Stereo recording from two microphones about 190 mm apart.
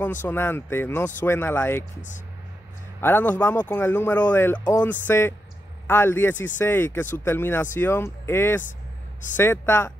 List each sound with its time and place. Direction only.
0.0 s speech: 10° left (ahead or behind)
3.0 s speech: 10° left (ahead or behind)